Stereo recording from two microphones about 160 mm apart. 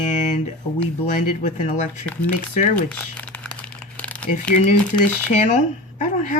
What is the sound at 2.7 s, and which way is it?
Crumpling, 5° left (ahead or behind).